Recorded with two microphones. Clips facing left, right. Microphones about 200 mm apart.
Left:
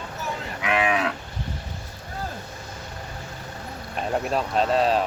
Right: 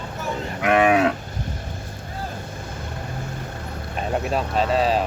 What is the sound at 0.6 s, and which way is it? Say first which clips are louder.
Moo: right 7 dB; 45° right (ahead or behind).